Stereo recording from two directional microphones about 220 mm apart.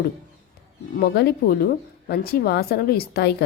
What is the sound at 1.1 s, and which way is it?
A woman's voice, 45° left (ahead or behind).